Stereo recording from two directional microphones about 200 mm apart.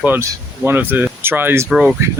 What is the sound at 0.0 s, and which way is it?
Speech, 10° right (ahead or behind).